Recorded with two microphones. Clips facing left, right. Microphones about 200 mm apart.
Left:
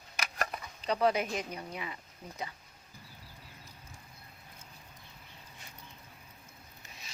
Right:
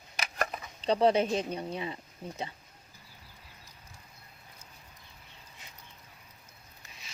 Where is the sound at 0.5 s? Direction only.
25° right (ahead or behind).